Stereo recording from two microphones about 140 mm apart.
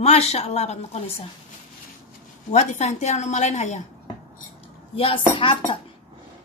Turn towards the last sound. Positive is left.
turn(degrees=40)  # may be behind; listen again after turning